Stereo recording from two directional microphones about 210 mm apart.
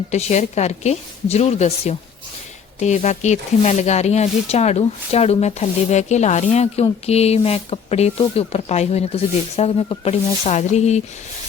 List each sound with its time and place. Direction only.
0.1 s speech: 30° left (ahead or behind)